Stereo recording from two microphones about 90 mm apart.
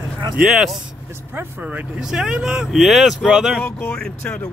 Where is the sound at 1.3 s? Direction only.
20° right (ahead or behind).